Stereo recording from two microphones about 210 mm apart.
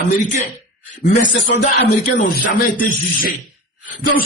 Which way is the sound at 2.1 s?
40° left (ahead or behind).